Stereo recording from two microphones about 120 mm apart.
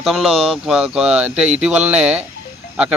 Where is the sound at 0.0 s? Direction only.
Centre (ahead or behind).